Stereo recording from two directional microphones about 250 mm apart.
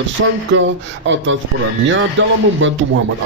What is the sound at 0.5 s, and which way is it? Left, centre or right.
Speech, right.